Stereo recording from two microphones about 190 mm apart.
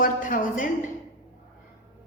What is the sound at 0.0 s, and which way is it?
Speech, 45° left (ahead or behind).